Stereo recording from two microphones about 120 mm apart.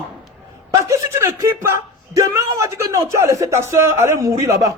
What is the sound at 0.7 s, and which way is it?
A man's voice, 25° right (ahead or behind).